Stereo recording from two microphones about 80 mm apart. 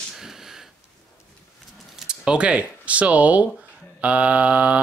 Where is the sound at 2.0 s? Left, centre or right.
Centre.